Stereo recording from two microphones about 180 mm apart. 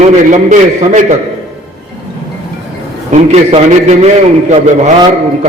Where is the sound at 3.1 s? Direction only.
35° right (ahead or behind).